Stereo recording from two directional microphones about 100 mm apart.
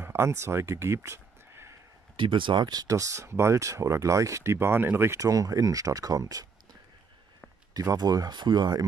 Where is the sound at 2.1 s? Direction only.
55° right (ahead or behind); by 6.5 s 35° right (ahead or behind).